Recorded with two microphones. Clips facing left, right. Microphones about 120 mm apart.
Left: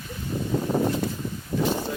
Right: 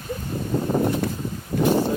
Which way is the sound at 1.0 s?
60° right (ahead or behind).